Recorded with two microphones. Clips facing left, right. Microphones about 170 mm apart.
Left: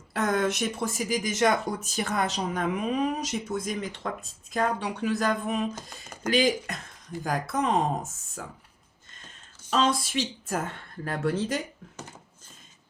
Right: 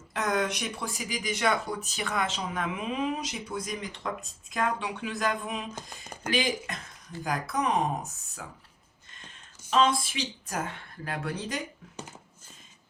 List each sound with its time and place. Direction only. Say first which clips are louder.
0.1 s speech: left 3 dB; 45° left (ahead or behind)
9.6 s speech: even; 40° left (ahead or behind)